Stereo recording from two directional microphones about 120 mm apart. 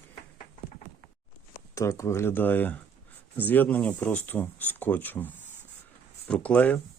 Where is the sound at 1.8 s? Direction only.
25° left (ahead or behind).